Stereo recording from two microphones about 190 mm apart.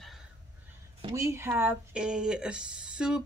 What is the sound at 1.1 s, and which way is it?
Speech, 15° right (ahead or behind).